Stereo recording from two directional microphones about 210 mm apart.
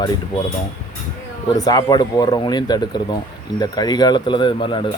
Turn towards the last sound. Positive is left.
turn(degrees=25)  # may be behind; listen again after turning